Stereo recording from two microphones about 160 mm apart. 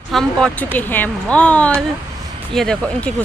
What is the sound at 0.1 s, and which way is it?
Speech, 5° left (ahead or behind).